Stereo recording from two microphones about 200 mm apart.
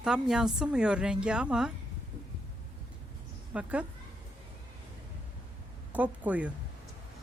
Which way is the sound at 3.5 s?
5° right (ahead or behind).